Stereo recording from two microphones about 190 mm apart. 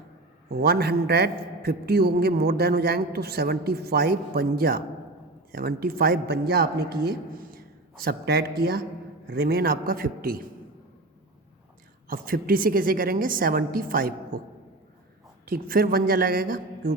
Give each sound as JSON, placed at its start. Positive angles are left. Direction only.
{"t": 0.5, "sound": "a man's voice", "side_deg": -55}
{"t": 12.0, "sound": "a woman's voice", "side_deg": -50}
{"t": 15.4, "sound": "a woman's voice", "side_deg": -50}